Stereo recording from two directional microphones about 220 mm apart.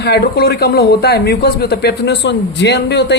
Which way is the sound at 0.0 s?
45° left (ahead or behind).